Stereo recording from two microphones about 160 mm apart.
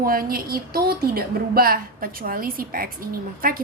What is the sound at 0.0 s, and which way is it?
A woman's voice, 65° right (ahead or behind).